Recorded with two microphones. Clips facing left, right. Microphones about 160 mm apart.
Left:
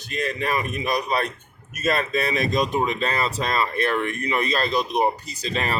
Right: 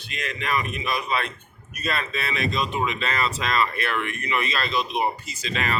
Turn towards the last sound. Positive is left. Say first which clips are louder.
# left 2 dB
turn(degrees=35)  # may be behind; listen again after turning